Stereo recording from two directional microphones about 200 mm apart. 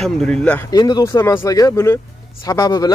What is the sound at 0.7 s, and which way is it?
Speech, 20° left (ahead or behind).